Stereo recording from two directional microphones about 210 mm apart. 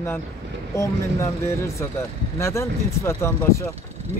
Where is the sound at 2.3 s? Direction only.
15° left (ahead or behind).